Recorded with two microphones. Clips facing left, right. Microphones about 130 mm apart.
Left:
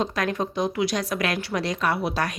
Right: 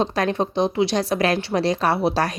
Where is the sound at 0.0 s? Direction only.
30° right (ahead or behind).